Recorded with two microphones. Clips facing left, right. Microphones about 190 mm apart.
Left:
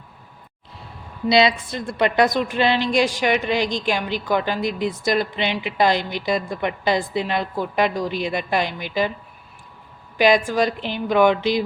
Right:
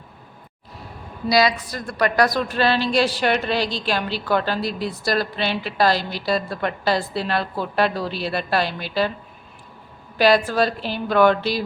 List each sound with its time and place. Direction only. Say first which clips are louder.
1.3 s a woman's voice: left 1 dB; 25° left (ahead or behind)
10.2 s a woman's voice: even; 15° left (ahead or behind)